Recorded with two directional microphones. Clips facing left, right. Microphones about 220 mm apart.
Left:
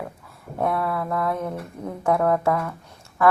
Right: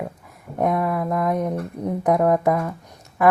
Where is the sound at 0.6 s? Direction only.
15° right (ahead or behind).